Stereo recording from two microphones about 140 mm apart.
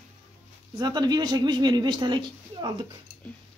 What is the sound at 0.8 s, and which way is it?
Speech, 30° right (ahead or behind).